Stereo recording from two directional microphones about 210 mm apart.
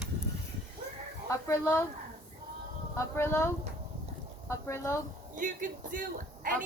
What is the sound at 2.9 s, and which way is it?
Speech, 15° left (ahead or behind).